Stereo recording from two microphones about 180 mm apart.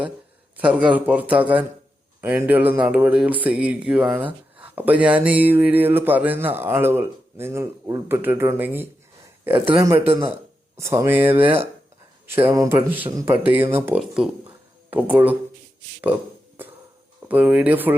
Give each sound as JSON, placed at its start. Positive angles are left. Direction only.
{"t": 0.5, "sound": "speech", "side_deg": -5}
{"t": 17.2, "sound": "speech", "side_deg": -10}